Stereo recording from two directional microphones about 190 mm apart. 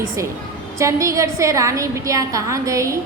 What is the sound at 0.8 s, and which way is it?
A woman's voice, 15° right (ahead or behind).